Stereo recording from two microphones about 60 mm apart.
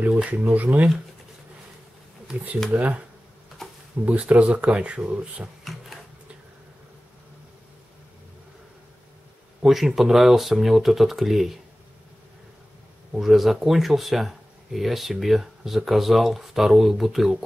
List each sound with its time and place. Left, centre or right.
0.4 s speech: right
2.7 s speech: right
4.0 s speech: right
5.6 s a sound: centre
9.6 s speech: centre
13.2 s speech: centre